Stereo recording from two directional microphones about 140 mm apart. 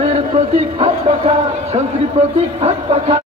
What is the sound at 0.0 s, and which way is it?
A man's voice, 45° right (ahead or behind).